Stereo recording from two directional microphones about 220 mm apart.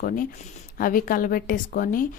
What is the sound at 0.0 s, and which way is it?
A woman's voice, 40° left (ahead or behind).